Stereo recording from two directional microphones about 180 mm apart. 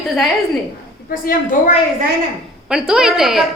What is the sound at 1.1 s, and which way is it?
Speech, 50° left (ahead or behind).